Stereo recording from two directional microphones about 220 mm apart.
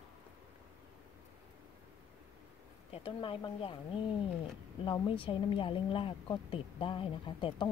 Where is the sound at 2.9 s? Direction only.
25° left (ahead or behind).